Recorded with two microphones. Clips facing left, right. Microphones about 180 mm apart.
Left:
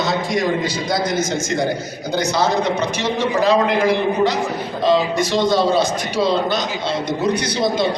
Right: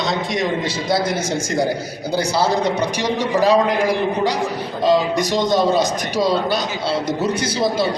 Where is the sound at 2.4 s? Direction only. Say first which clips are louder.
Even; 10° right (ahead or behind).